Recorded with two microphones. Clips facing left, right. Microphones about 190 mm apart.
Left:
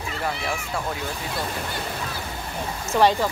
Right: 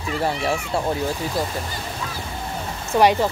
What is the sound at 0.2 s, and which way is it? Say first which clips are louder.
Speech: right 5 dB; 30° right (ahead or behind).